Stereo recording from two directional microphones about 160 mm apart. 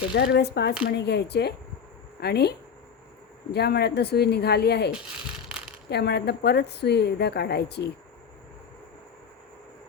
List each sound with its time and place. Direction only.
0.1 s a woman's voice: 90° left
5.9 s a woman's voice: 90° left